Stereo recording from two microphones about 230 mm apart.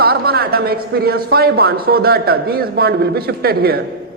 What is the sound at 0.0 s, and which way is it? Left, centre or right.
A man's voice, right.